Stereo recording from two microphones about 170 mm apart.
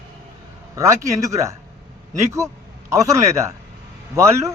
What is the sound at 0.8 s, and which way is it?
Speech, 20° right (ahead or behind).